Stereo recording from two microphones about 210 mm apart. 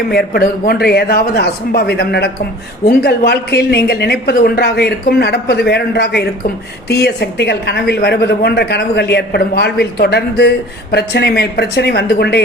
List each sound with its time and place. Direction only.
0.1 s a woman's voice: 45° left (ahead or behind)